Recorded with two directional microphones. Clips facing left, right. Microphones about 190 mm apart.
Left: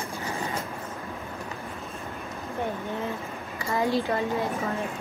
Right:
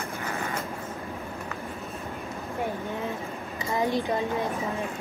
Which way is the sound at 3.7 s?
15° right (ahead or behind).